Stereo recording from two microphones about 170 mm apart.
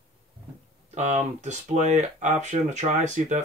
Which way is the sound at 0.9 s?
40° right (ahead or behind).